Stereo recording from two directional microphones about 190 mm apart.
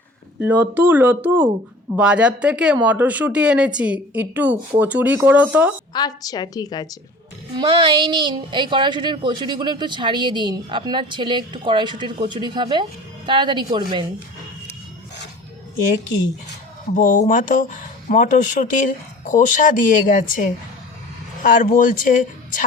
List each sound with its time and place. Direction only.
0.3 s a woman's voice: 10° right (ahead or behind)
5.9 s a woman's voice: 20° left (ahead or behind)
7.5 s a woman's voice: 25° right (ahead or behind)
16.9 s speech: 45° left (ahead or behind)